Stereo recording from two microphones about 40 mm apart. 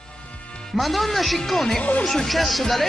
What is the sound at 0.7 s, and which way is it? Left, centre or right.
Speech, centre.